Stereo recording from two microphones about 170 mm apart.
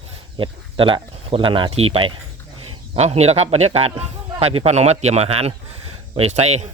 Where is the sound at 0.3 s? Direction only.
30° right (ahead or behind).